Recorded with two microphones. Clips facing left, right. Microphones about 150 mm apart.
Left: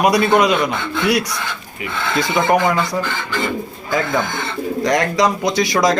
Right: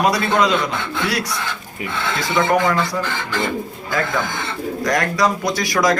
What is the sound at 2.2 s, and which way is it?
Speech, 20° left (ahead or behind).